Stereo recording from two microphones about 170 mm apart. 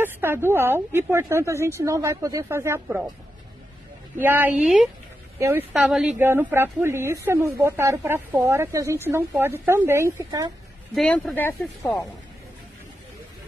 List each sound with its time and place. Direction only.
0.0 s speech: 15° right (ahead or behind)
4.2 s speech: 10° right (ahead or behind)
11.0 s speech: centre (ahead or behind)
11.3 s speech: 15° left (ahead or behind)